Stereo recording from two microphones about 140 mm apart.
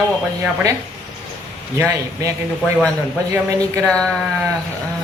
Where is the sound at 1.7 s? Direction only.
20° right (ahead or behind).